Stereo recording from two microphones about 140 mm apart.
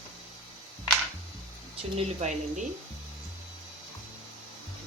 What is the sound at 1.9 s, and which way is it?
Speech, 55° right (ahead or behind).